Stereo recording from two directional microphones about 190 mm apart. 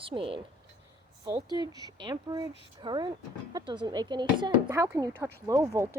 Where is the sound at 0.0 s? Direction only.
30° right (ahead or behind).